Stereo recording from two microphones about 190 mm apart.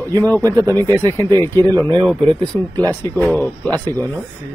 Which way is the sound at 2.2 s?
25° right (ahead or behind).